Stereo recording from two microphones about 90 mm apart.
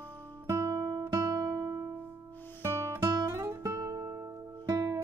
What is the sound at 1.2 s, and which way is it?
Music, 35° right (ahead or behind).